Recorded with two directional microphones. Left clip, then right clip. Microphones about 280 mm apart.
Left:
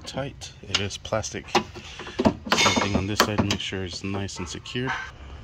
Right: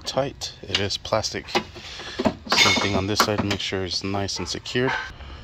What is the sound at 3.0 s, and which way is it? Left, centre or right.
Speech, centre.